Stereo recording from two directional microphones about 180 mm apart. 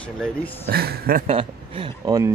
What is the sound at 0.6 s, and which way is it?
Speech, 60° right (ahead or behind).